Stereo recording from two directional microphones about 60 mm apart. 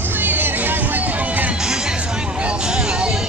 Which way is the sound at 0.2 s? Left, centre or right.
Right.